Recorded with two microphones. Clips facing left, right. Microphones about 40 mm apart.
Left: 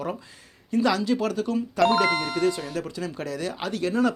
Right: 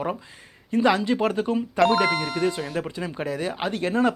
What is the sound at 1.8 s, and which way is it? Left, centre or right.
Speech, centre.